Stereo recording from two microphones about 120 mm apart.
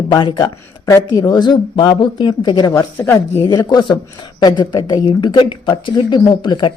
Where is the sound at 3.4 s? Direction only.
35° left (ahead or behind).